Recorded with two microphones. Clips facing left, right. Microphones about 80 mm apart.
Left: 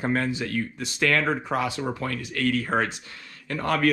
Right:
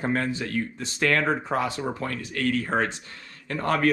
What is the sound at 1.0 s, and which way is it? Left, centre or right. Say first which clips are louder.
Speech: even; right.